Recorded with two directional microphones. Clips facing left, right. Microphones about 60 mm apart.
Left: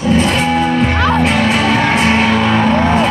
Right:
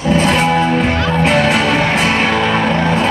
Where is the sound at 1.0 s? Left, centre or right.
Left.